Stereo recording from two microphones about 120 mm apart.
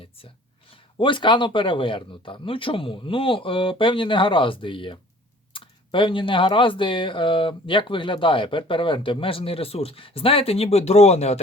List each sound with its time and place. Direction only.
0.7 s speech: 45° left (ahead or behind); by 11.3 s 65° left (ahead or behind)